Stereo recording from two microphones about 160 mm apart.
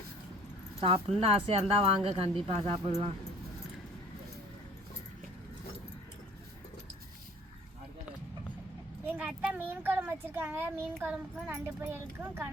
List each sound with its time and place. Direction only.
0.8 s speech: 35° right (ahead or behind)
9.0 s a child's voice: 10° right (ahead or behind)